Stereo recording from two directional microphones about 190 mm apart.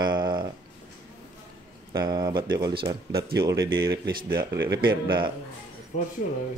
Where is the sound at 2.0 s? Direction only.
20° right (ahead or behind).